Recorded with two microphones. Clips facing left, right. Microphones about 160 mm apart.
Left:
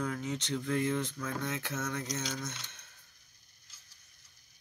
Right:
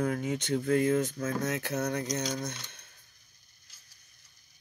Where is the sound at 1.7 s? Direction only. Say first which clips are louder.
Right 6 dB; 70° right (ahead or behind).